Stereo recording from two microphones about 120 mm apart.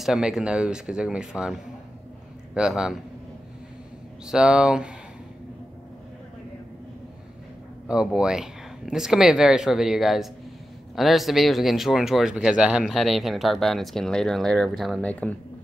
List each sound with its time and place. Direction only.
0.0 s speech: 5° right (ahead or behind)
4.3 s speech: 5° right (ahead or behind)
7.9 s speech: 5° right (ahead or behind)
15.0 s speech: 10° left (ahead or behind)